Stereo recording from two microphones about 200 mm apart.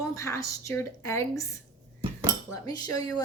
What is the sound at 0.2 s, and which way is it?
Speech, 15° left (ahead or behind).